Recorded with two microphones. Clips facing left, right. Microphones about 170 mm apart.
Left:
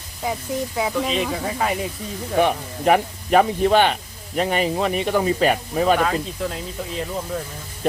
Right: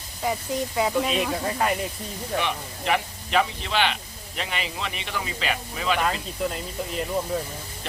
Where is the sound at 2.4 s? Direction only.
45° left (ahead or behind).